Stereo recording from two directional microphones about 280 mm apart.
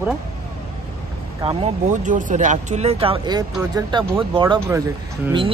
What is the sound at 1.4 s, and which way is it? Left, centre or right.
Speech, centre.